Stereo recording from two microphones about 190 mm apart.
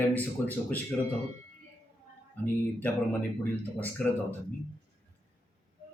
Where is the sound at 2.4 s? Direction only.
10° left (ahead or behind).